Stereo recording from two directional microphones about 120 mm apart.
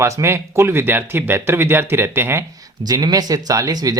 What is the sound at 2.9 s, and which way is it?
Speech, 30° right (ahead or behind).